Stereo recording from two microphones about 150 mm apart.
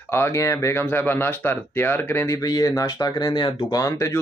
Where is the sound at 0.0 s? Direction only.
15° left (ahead or behind).